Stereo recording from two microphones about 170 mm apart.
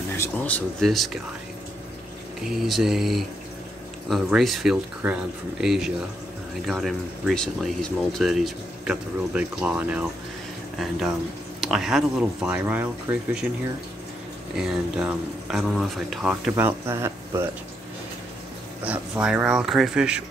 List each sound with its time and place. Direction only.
0.1 s speech: 10° left (ahead or behind)
2.5 s speech: centre (ahead or behind)
14.5 s speech: 5° right (ahead or behind)
16.5 s speech: 15° right (ahead or behind)
18.9 s speech: 5° right (ahead or behind)